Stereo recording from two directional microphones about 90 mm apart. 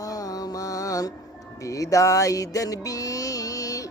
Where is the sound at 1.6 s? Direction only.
35° left (ahead or behind).